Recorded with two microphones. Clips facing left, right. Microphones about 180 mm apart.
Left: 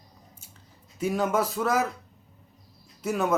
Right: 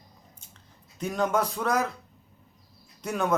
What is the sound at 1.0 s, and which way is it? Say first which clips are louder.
Speech: left 1 dB; 5° left (ahead or behind).